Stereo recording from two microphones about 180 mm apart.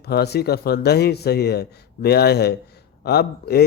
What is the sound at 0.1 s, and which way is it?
Speech, 65° left (ahead or behind).